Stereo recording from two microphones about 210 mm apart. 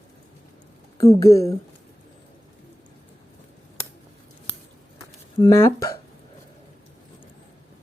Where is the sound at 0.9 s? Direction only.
15° left (ahead or behind).